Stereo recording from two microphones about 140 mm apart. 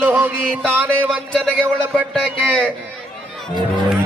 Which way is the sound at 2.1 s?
5° left (ahead or behind).